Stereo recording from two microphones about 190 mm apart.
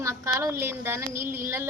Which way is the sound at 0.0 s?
15° right (ahead or behind).